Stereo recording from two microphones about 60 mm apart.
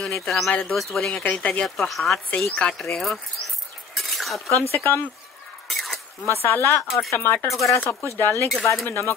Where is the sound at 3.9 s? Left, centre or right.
Centre.